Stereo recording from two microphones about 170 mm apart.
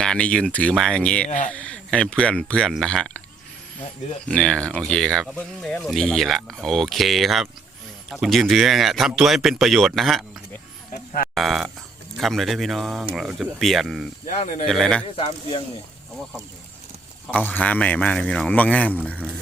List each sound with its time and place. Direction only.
0.0 s speech: 5° left (ahead or behind)
1.3 s speech: 45° left (ahead or behind)
1.5 s speech: 5° left (ahead or behind)
4.3 s speech: 5° left (ahead or behind)
10.9 s a sound: 55° left (ahead or behind)
11.3 s speech: centre (ahead or behind)
14.3 s speech: 50° left (ahead or behind)
14.7 s speech: 5° left (ahead or behind)
15.1 s speech: 30° left (ahead or behind)
17.3 s speech: 10° left (ahead or behind)